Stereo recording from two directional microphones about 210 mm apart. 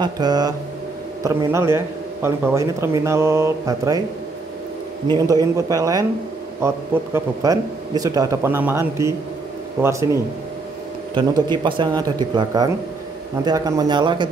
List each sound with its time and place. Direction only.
0.0 s speech: 20° right (ahead or behind)
5.1 s speech: 15° right (ahead or behind)
7.2 s speech: 15° right (ahead or behind)